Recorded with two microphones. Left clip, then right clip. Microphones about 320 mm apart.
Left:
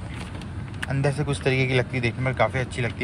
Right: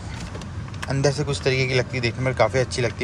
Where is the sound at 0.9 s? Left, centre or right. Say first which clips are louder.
Right 4 dB; centre.